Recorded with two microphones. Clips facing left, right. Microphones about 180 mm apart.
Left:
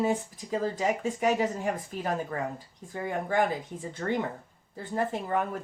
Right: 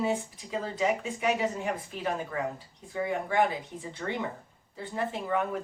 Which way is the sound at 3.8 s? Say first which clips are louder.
Left 3 dB; 45° left (ahead or behind).